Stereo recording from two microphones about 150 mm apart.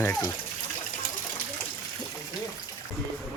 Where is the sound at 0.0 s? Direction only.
15° left (ahead or behind).